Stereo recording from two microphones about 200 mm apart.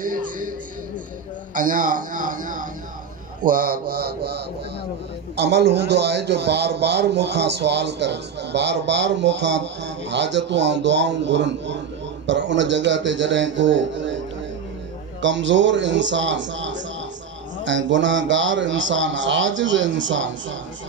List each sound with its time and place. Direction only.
0.0 s music: 45° right (ahead or behind)
1.5 s a man's voice: 40° right (ahead or behind); by 14.2 s 65° right (ahead or behind)
15.2 s a man's voice: 65° right (ahead or behind)